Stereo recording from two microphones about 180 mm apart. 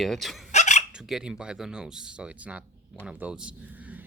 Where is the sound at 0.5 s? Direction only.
40° left (ahead or behind).